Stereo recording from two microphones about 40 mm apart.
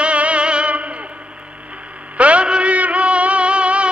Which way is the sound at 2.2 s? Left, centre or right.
Right.